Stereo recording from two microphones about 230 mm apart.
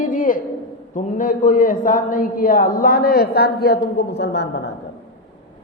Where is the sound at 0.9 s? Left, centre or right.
Left.